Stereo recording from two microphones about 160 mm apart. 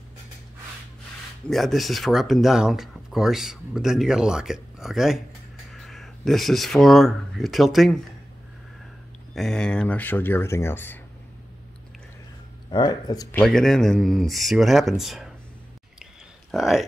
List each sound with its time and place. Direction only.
1.5 s speech: centre (ahead or behind)
9.3 s speech: 5° left (ahead or behind)
12.7 s speech: 25° left (ahead or behind)
13.3 s speech: 5° left (ahead or behind)
16.5 s speech: centre (ahead or behind)